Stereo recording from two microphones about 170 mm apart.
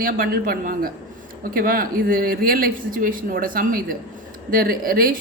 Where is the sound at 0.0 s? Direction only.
55° right (ahead or behind).